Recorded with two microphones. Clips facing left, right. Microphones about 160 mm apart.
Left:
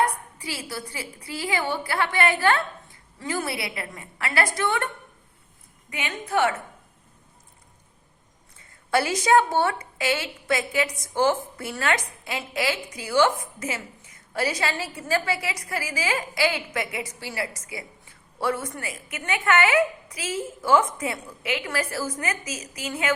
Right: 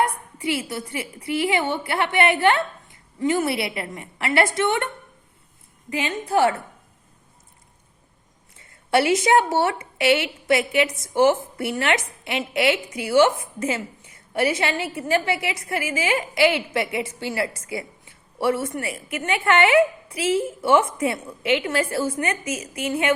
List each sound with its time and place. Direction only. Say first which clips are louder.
0.3 s a woman's voice: right 7 dB; 25° right (ahead or behind)
5.9 s a woman's voice: right 5 dB; 30° right (ahead or behind)
8.9 s a woman's voice: right 3 dB; 25° right (ahead or behind)